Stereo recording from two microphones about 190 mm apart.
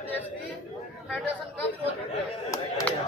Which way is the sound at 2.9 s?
5° left (ahead or behind).